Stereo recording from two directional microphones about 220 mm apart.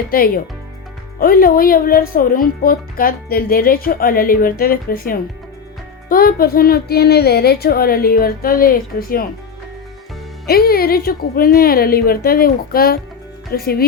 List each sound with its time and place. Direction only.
0.1 s a child's voice: 40° left (ahead or behind)
10.4 s speech: 45° left (ahead or behind)